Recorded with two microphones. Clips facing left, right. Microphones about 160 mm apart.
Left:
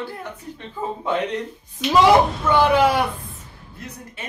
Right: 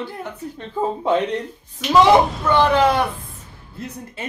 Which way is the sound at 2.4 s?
5° left (ahead or behind).